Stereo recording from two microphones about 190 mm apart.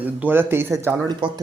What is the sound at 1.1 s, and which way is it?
Speech, 25° right (ahead or behind).